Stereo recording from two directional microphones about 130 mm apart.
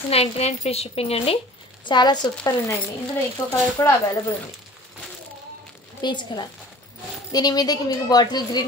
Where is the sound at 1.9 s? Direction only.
35° left (ahead or behind).